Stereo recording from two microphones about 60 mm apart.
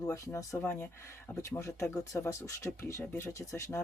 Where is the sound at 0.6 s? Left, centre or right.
Left.